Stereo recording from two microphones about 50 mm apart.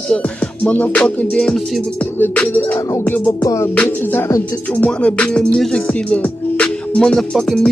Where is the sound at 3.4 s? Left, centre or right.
Left.